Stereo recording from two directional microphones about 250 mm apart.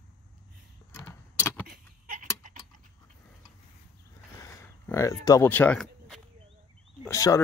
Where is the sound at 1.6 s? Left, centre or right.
Right.